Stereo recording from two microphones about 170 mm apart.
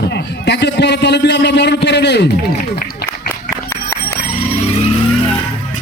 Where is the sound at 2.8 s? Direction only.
70° left (ahead or behind).